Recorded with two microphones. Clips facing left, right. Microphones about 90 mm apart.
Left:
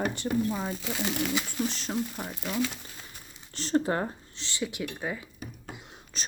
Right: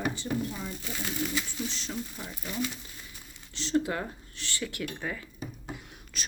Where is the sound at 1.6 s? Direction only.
45° left (ahead or behind).